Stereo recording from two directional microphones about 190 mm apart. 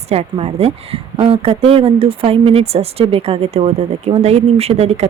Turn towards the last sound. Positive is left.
turn(degrees=-35)  # may be behind; listen again after turning